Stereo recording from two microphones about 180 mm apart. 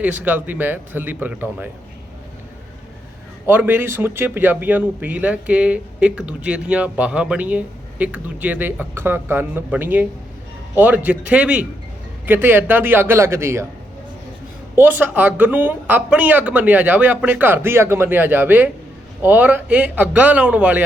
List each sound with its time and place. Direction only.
0.0 s speech: 10° right (ahead or behind)
3.4 s speech: 10° right (ahead or behind)
14.8 s speech: 10° right (ahead or behind)